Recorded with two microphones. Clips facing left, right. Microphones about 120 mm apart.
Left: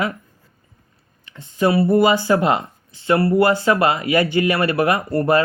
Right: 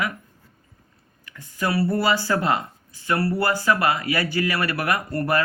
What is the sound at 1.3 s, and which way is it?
Speech, 25° left (ahead or behind).